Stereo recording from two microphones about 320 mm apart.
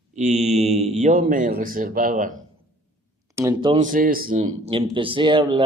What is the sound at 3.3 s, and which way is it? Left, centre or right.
Speech, centre.